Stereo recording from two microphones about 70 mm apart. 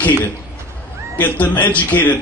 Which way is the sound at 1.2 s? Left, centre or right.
Left.